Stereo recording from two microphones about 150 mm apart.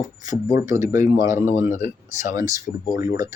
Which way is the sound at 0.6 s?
20° right (ahead or behind).